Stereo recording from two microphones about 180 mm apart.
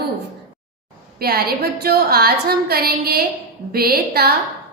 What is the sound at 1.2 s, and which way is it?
A woman's voice, 60° right (ahead or behind).